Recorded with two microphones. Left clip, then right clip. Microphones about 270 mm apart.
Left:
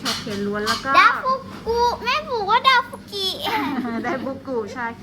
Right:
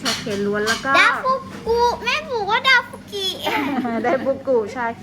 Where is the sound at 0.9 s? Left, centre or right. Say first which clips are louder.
Left 1 dB; left.